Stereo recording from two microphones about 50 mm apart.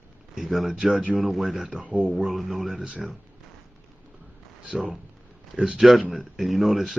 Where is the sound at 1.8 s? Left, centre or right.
Right.